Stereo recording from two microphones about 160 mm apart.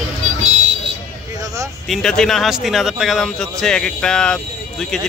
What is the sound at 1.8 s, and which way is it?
Speech, centre (ahead or behind).